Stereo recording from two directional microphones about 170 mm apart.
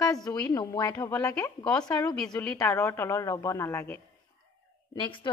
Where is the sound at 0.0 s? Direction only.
20° left (ahead or behind).